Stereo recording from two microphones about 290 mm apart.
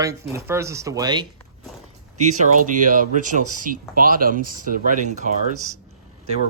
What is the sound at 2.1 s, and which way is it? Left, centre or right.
Speech, right.